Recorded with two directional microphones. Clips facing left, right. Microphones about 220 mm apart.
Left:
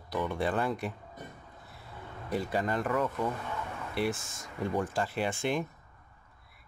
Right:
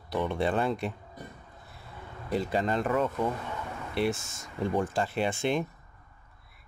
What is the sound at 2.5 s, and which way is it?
Speech, 25° right (ahead or behind).